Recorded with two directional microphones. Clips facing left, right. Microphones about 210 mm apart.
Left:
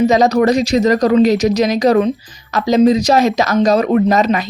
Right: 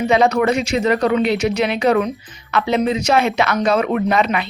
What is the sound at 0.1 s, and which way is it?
Speech, 40° left (ahead or behind).